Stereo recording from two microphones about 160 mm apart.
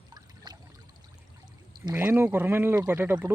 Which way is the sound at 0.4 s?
25° right (ahead or behind).